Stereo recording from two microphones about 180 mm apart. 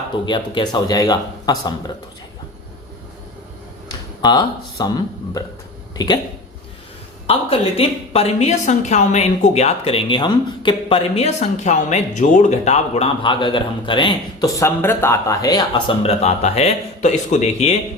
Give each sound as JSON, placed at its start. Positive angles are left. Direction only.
{"t": 0.3, "sound": "speech", "side_deg": 25}
{"t": 4.2, "sound": "speech", "side_deg": 25}
{"t": 7.3, "sound": "a woman's voice", "side_deg": 35}